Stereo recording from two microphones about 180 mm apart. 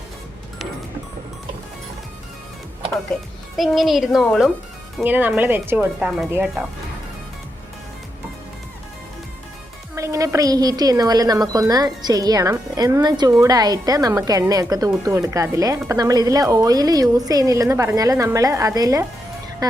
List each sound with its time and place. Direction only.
3.6 s a woman's voice: centre (ahead or behind)
9.9 s a woman's voice: 15° right (ahead or behind)